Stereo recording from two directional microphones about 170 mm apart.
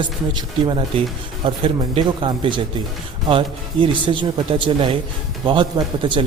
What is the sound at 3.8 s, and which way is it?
Speech, 30° right (ahead or behind).